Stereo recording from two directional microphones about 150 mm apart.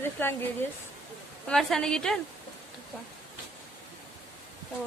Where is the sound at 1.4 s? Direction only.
5° left (ahead or behind).